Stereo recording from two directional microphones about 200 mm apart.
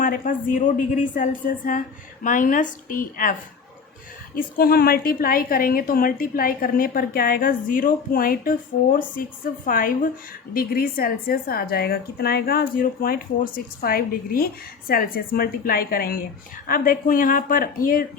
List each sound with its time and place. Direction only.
0.0 s a woman's voice: 45° left (ahead or behind)
4.4 s a woman's voice: 45° left (ahead or behind)